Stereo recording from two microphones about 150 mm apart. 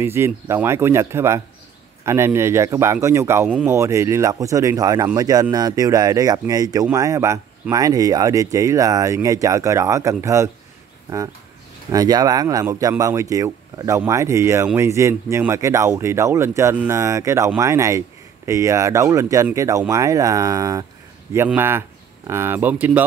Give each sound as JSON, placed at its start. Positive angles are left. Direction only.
{"t": 0.0, "sound": "speech", "side_deg": -15}
{"t": 3.4, "sound": "speech", "side_deg": -5}
{"t": 3.7, "sound": "speech", "side_deg": -20}
{"t": 11.9, "sound": "speech", "side_deg": -25}